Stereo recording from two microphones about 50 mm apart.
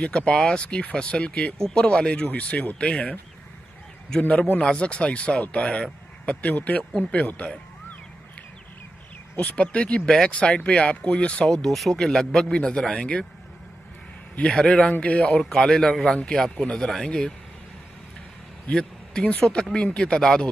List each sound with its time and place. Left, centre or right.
0.0 s speech: left
4.2 s speech: left
9.4 s speech: left
10.0 s speech: centre
10.3 s speech: left
11.5 s speech: centre
14.5 s speech: centre
14.9 s speech: left
15.5 s speech: centre
18.7 s a sound: centre
19.4 s speech: centre